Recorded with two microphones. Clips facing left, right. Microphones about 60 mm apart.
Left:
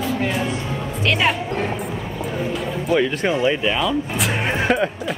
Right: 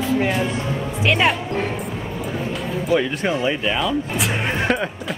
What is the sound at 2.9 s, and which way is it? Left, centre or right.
Speech, centre.